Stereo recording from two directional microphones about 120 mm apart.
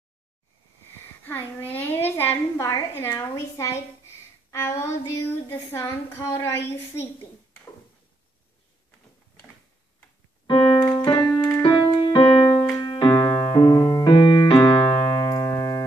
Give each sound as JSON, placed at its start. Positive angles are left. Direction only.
{"t": 1.7, "sound": "a woman's voice", "side_deg": 15}
{"t": 10.4, "sound": "keyboard", "side_deg": 35}
{"t": 11.4, "sound": "music", "side_deg": 20}
{"t": 12.7, "sound": "piano", "side_deg": 40}
{"t": 14.6, "sound": "music", "side_deg": 40}